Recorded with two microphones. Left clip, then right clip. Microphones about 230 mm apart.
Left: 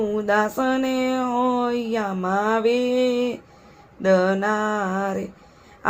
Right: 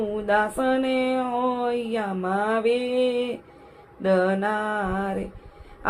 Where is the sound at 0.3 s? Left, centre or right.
Left.